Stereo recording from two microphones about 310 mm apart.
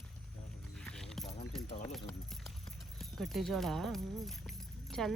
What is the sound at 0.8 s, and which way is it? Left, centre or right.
Clip-clop, centre.